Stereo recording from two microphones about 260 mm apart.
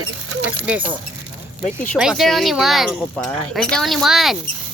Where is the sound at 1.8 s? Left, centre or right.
Centre.